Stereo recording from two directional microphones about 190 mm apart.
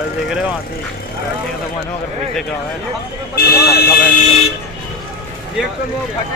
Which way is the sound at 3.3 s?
55° left (ahead or behind).